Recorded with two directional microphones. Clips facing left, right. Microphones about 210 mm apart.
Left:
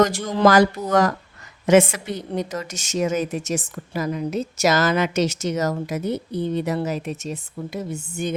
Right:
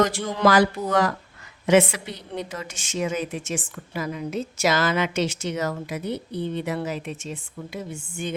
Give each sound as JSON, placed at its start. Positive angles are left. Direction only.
{"t": 0.3, "sound": "a woman's voice", "side_deg": 45}